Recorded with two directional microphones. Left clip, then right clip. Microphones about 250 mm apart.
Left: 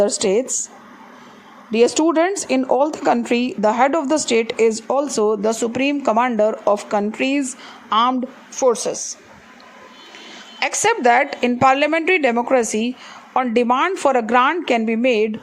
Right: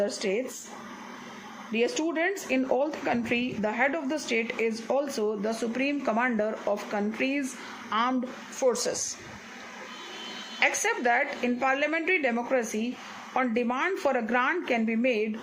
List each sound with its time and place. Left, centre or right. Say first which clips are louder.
0.0 s speech: left 11 dB; left
1.7 s a woman's voice: left 12 dB; left
10.6 s speech: left 8 dB; left